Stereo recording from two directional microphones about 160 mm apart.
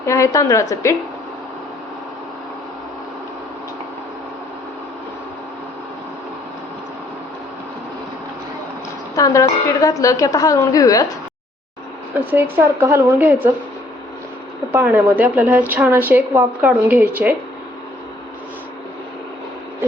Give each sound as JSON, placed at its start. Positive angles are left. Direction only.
{"t": 0.0, "sound": "a woman's voice", "side_deg": 20}
{"t": 9.1, "sound": "a woman's voice", "side_deg": 20}
{"t": 12.1, "sound": "a woman's voice", "side_deg": -10}
{"t": 14.7, "sound": "a woman's voice", "side_deg": -10}